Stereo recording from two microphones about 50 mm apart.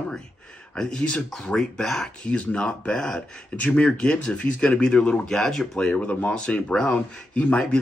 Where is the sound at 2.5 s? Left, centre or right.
Left.